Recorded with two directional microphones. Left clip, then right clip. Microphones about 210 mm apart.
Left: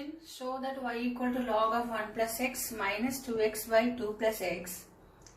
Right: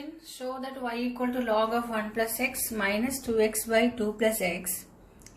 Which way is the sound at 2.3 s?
45° right (ahead or behind).